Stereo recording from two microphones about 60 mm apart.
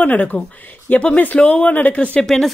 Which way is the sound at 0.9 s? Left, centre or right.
Centre.